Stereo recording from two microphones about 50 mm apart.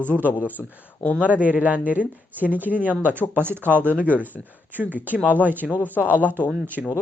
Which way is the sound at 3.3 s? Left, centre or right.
Right.